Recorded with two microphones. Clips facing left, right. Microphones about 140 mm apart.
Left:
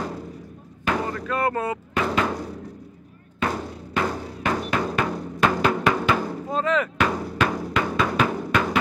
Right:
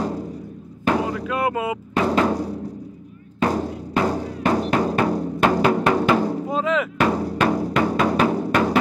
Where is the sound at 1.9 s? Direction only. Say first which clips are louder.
Right 5 dB; 30° right (ahead or behind).